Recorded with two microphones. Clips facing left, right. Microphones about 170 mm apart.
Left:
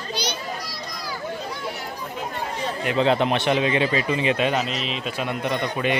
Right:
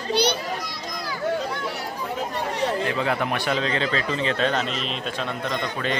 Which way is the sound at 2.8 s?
20° left (ahead or behind).